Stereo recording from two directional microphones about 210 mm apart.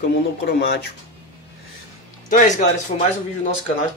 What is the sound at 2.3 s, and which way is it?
Speech, 40° left (ahead or behind).